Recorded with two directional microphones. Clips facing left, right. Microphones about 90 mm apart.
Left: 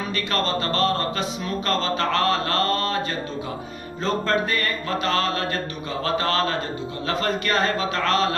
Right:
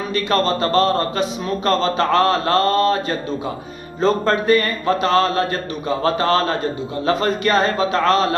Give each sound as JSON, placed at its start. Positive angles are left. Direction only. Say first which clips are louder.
{"t": 0.1, "sound": "a man's voice", "louder": "right 8 dB", "side_deg": -30}